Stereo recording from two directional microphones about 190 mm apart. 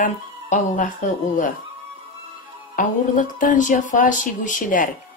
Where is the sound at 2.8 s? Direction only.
45° left (ahead or behind).